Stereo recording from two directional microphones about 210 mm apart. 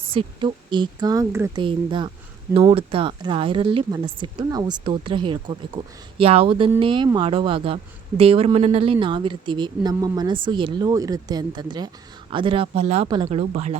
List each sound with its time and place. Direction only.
0.1 s speech: 25° right (ahead or behind)